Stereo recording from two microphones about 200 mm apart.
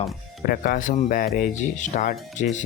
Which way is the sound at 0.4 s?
45° left (ahead or behind).